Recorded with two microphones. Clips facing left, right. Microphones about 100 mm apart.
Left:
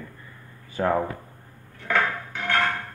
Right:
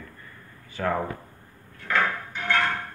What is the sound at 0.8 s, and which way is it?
Speech, 25° left (ahead or behind).